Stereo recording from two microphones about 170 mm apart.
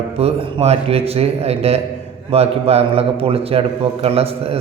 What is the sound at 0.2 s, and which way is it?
A man's voice, 35° right (ahead or behind).